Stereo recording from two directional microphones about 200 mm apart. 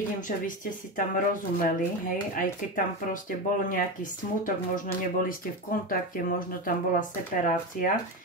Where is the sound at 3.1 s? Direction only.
40° left (ahead or behind).